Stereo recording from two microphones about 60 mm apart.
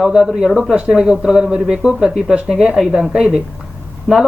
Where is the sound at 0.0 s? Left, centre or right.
Centre.